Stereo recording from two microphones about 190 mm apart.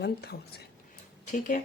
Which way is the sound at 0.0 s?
60° left (ahead or behind).